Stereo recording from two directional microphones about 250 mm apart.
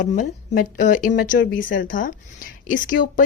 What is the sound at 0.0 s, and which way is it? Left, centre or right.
Speech, left.